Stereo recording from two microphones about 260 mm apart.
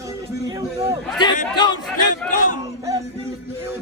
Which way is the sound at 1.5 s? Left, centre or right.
Centre.